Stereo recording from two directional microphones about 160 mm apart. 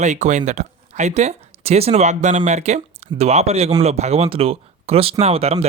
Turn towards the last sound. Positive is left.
turn(degrees=-40)  # may be behind; listen again after turning